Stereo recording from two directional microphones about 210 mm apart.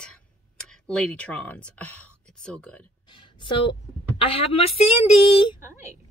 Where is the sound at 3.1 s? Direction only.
25° left (ahead or behind).